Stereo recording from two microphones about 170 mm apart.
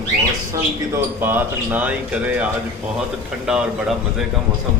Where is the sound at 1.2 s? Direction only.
10° right (ahead or behind).